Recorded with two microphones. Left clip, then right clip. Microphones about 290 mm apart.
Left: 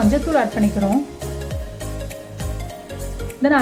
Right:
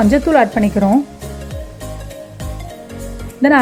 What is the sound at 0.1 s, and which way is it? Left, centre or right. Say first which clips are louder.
Speech: right 6 dB; right.